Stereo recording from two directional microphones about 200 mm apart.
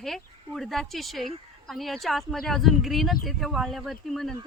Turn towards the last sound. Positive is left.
turn(degrees=0)  # may be behind; listen again after turning